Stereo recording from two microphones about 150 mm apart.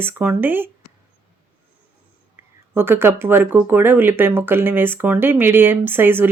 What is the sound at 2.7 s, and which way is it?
Speech, 15° right (ahead or behind).